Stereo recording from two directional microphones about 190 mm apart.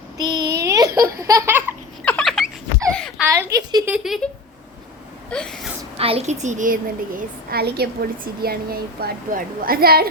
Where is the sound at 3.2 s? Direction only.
15° right (ahead or behind).